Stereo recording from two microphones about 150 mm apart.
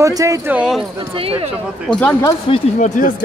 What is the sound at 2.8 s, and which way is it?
Speech, 60° left (ahead or behind).